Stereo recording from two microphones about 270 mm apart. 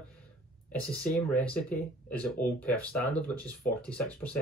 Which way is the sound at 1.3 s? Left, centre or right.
Centre.